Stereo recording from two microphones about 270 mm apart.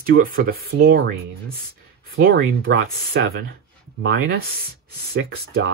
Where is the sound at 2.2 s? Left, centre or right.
Right.